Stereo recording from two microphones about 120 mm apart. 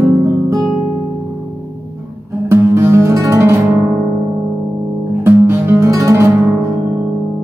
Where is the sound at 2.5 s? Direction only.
20° right (ahead or behind).